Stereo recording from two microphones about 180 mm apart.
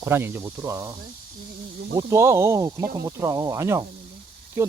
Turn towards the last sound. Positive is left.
turn(degrees=-15)  # may be behind; listen again after turning